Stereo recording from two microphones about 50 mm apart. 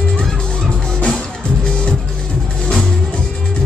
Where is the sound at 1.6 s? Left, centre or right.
Left.